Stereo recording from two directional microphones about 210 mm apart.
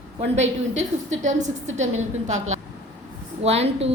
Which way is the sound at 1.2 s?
35° right (ahead or behind).